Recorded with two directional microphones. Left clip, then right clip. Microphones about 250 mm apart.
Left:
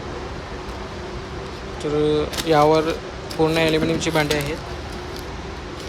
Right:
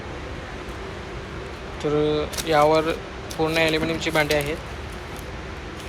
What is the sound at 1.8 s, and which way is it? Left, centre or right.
Speech, centre.